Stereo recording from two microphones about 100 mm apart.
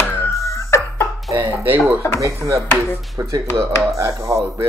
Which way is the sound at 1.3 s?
30° right (ahead or behind).